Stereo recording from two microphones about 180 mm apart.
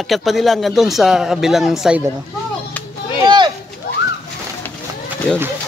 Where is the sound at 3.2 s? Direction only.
25° right (ahead or behind).